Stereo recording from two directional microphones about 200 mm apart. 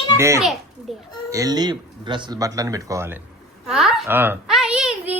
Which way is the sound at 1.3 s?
15° right (ahead or behind).